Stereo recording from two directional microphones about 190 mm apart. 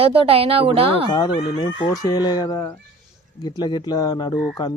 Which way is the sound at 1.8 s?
20° left (ahead or behind).